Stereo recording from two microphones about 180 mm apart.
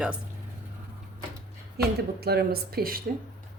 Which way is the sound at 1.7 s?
60° right (ahead or behind).